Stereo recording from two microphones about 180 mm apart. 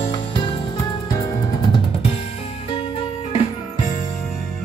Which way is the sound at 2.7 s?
30° left (ahead or behind).